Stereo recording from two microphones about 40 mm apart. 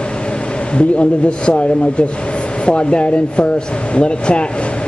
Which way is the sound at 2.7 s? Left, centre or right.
Left.